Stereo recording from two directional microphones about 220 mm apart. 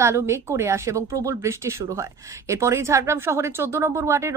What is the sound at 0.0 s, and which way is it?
A woman's voice, 10° right (ahead or behind).